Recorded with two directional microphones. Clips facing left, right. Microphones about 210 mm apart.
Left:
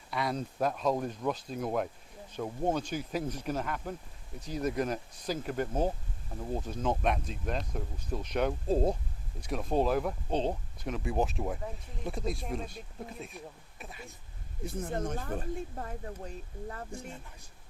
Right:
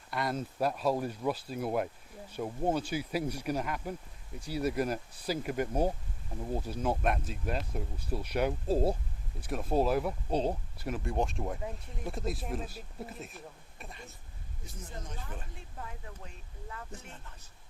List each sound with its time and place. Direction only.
0.1 s speech: centre (ahead or behind)
14.6 s speech: 60° left (ahead or behind); by 16.8 s 40° left (ahead or behind)
16.9 s speech: 10° left (ahead or behind)